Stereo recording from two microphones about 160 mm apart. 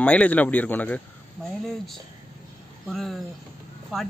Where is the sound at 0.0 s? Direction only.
10° left (ahead or behind).